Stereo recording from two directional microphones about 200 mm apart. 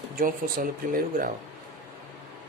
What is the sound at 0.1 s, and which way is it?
Speech, 45° right (ahead or behind).